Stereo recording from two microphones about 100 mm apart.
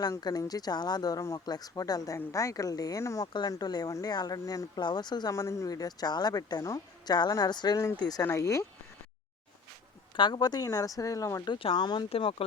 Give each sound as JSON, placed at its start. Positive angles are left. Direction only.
{"t": 0.2, "sound": "a woman's voice", "side_deg": 40}
{"t": 5.3, "sound": "a woman's voice", "side_deg": 30}
{"t": 8.3, "sound": "a woman's voice", "side_deg": 30}
{"t": 10.2, "sound": "a woman's voice", "side_deg": 50}
{"t": 11.4, "sound": "speech", "side_deg": 50}
{"t": 12.1, "sound": "speech", "side_deg": 75}